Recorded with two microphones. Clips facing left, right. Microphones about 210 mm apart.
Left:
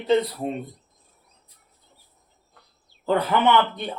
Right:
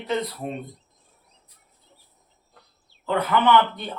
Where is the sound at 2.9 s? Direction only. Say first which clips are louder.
Left 3 dB; 35° left (ahead or behind).